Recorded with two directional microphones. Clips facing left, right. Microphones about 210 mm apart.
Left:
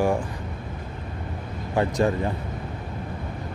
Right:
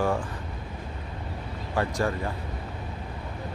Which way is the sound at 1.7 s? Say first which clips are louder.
Left 5 dB; 20° left (ahead or behind).